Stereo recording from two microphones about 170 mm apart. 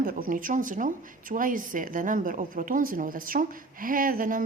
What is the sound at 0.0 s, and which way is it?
A woman's voice, 55° right (ahead or behind).